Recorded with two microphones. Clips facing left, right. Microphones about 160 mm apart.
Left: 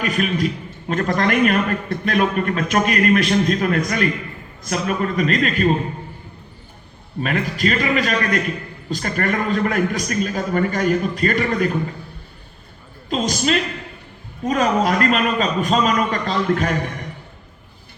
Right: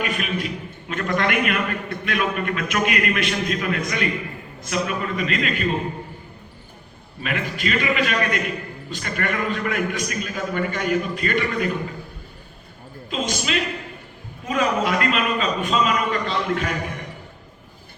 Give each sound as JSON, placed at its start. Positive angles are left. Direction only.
{"t": 0.0, "sound": "a man's voice", "side_deg": 40}
{"t": 7.2, "sound": "a man's voice", "side_deg": 40}
{"t": 13.1, "sound": "a man's voice", "side_deg": 40}